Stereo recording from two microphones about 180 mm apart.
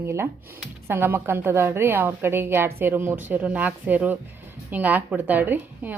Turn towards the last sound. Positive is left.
turn(degrees=-10)  # may be behind; listen again after turning